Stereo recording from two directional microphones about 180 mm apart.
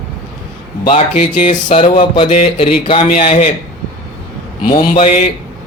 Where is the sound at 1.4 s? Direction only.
30° left (ahead or behind).